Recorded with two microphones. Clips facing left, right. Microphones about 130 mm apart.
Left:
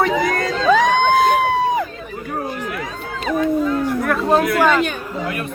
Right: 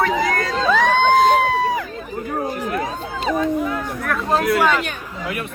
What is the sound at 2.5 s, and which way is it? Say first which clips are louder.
Run: right 3 dB; 35° right (ahead or behind).